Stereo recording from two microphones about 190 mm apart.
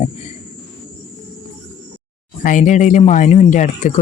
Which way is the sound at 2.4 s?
40° left (ahead or behind).